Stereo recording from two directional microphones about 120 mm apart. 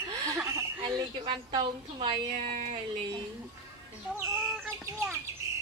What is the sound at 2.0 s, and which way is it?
Speech, 55° right (ahead or behind).